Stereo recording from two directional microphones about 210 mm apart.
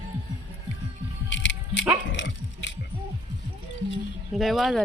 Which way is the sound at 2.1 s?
60° left (ahead or behind).